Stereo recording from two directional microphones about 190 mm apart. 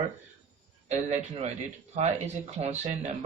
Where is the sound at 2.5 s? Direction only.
35° right (ahead or behind).